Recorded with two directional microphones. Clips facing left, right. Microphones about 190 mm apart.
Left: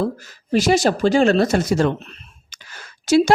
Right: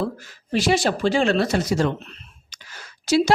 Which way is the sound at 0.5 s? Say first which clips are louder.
Left 4 dB; 45° left (ahead or behind).